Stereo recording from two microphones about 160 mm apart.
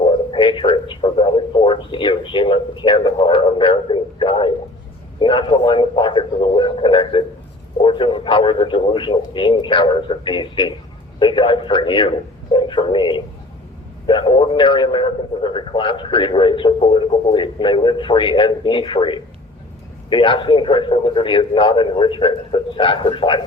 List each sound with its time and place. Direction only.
0.0 s a man's voice: 30° left (ahead or behind)